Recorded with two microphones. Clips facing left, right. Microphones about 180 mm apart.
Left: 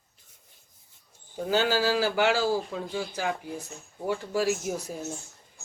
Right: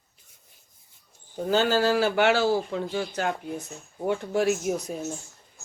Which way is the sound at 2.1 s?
75° right (ahead or behind).